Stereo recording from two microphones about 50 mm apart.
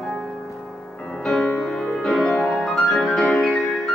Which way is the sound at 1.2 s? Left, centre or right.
Centre.